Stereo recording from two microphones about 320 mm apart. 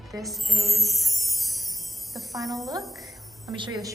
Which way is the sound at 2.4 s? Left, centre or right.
Centre.